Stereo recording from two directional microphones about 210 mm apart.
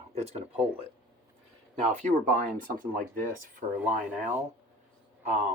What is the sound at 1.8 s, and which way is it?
Speech, 35° right (ahead or behind).